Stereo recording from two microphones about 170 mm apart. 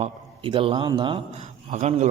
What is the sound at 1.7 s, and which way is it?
Speech, 45° right (ahead or behind).